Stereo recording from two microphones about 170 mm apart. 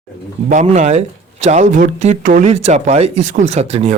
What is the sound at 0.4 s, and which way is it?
Speech, 45° right (ahead or behind).